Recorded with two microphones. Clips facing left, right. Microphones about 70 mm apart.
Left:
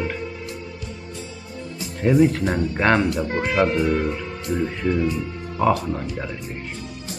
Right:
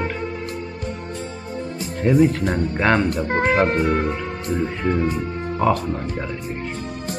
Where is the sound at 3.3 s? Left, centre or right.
Right.